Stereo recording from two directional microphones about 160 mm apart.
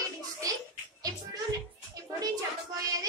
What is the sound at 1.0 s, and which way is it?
Music, 20° right (ahead or behind).